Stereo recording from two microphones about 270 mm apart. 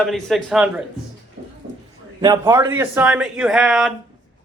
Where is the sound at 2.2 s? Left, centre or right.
Centre.